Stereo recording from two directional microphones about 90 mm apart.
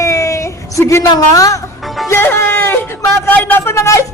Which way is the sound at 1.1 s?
40° left (ahead or behind).